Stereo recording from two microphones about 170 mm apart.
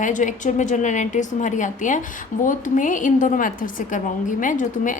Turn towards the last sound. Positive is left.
turn(degrees=50)  # may be behind; listen again after turning